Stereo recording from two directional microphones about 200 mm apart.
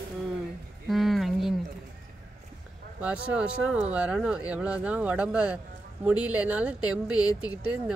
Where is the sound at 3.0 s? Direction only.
5° right (ahead or behind).